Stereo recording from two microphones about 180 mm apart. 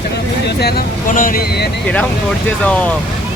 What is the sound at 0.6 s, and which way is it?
Speech, 55° left (ahead or behind).